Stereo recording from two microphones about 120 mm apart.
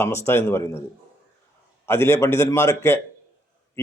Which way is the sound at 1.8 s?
20° left (ahead or behind).